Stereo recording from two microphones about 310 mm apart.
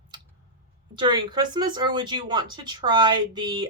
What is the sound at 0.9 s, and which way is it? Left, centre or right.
Speech, centre.